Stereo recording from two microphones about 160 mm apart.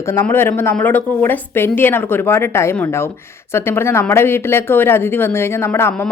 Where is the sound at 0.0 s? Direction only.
15° left (ahead or behind).